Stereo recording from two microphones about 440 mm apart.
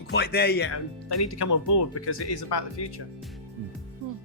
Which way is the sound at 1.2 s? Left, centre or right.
Left.